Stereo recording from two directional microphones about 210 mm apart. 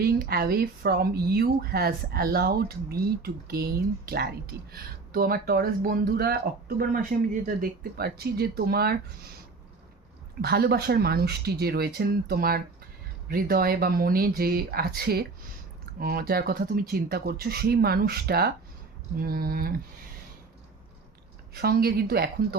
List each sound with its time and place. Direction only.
0.0 s speech: 45° right (ahead or behind)
10.4 s speech: 50° right (ahead or behind)
21.5 s speech: 45° right (ahead or behind)